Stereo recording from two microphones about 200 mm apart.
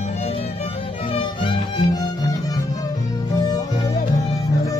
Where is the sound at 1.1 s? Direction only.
20° left (ahead or behind).